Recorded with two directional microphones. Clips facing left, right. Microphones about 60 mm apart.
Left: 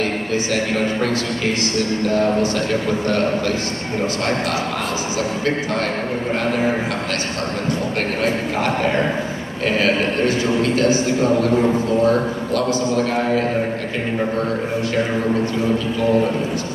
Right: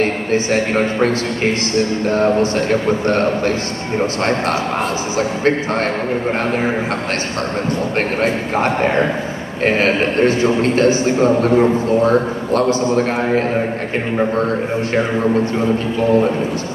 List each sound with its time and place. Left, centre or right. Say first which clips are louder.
0.5 s a man's voice: right 2 dB; right
3.1 s a man's voice: right 2 dB; right
7.9 s a man's voice: right 4 dB; right
12.5 s a man's voice: right 4 dB; right